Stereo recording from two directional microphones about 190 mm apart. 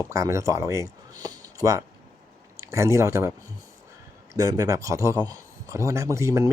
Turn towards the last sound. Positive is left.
turn(degrees=-15)  # may be behind; listen again after turning